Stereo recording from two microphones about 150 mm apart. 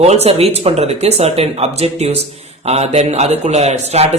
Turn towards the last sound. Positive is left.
turn(degrees=-45)  # may be behind; listen again after turning